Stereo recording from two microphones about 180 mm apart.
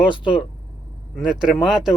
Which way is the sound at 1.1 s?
Centre (ahead or behind).